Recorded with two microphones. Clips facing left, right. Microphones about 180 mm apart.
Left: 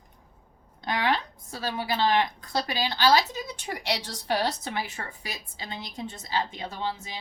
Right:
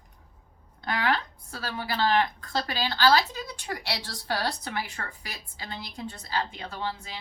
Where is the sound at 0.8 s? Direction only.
20° left (ahead or behind).